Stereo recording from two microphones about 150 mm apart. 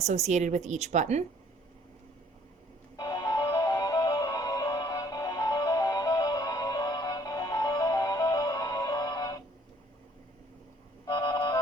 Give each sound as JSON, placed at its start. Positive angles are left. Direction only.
{"t": 0.0, "sound": "a woman's voice", "side_deg": -50}
{"t": 2.9, "sound": "music", "side_deg": 25}
{"t": 11.0, "sound": "a sound", "side_deg": 20}